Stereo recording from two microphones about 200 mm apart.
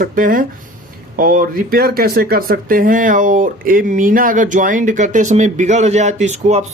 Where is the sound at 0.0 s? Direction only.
45° right (ahead or behind).